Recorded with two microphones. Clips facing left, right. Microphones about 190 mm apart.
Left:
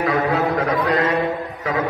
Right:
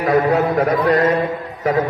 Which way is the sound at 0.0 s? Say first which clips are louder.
Right 4 dB; 45° right (ahead or behind).